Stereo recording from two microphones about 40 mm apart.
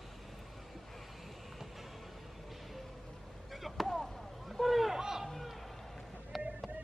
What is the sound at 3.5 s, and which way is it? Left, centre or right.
Basketball bounce, centre.